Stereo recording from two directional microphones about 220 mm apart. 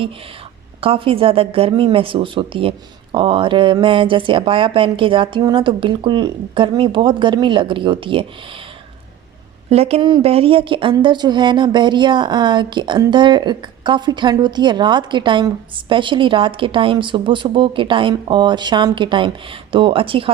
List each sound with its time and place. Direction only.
0.8 s speech: 25° right (ahead or behind)
9.6 s speech: 30° right (ahead or behind)